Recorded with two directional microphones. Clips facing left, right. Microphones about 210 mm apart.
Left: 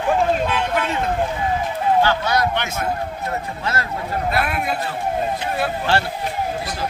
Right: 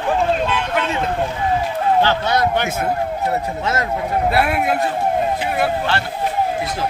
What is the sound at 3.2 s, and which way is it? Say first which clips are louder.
Speech: right 4 dB; 20° right (ahead or behind).